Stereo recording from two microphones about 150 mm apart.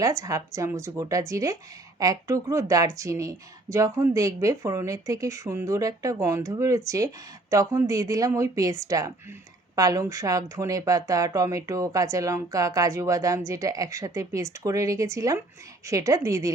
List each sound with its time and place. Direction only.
0.0 s speech: 20° right (ahead or behind)